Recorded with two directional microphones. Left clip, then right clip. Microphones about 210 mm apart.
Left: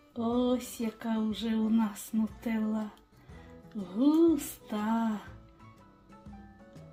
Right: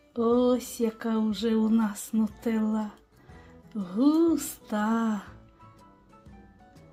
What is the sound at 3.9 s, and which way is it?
Music, 30° right (ahead or behind).